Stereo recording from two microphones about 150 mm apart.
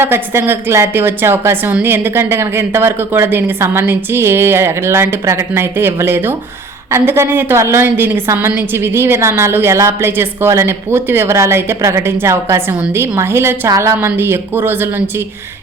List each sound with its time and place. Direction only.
0.0 s a woman's voice: 15° right (ahead or behind)